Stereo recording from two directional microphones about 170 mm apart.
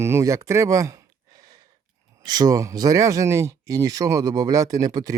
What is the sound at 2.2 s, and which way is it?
Speech, 25° right (ahead or behind).